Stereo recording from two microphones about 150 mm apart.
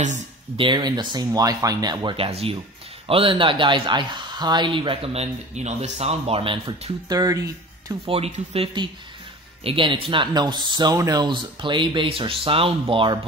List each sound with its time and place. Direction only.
0.6 s speech: 30° right (ahead or behind)
8.0 s speech: 40° right (ahead or behind)